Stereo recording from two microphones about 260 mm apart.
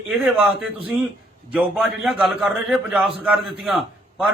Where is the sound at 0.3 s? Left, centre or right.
Centre.